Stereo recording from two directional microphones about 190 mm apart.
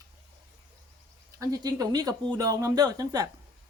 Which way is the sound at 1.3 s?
20° right (ahead or behind).